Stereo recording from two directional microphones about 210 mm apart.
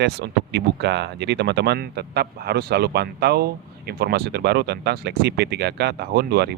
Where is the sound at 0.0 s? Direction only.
50° right (ahead or behind).